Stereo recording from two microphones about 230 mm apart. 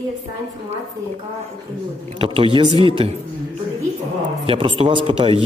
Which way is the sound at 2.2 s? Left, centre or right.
Right.